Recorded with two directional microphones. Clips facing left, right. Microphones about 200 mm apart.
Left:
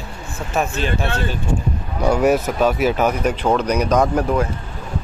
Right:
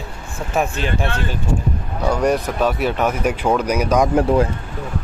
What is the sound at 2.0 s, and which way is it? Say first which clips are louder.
Speech: left 2 dB; 5° left (ahead or behind).